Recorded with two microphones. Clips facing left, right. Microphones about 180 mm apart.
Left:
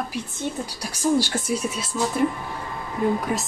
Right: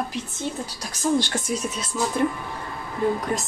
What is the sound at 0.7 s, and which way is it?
Speech, 10° left (ahead or behind).